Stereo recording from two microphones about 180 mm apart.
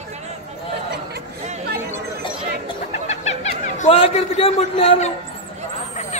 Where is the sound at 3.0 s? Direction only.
40° left (ahead or behind).